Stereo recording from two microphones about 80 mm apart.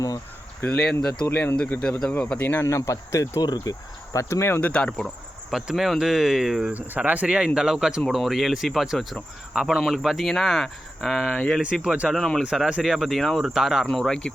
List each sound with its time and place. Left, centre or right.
0.6 s speech: centre
2.5 s speech: left
3.4 s speech: left
4.6 s speech: centre
5.5 s speech: centre
6.9 s speech: centre
11.6 s speech: centre
14.0 s speech: centre